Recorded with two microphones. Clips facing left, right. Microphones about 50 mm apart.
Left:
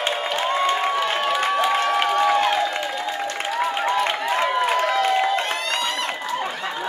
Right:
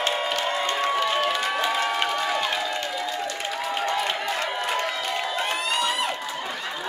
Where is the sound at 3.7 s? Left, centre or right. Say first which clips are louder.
Left 2 dB; left.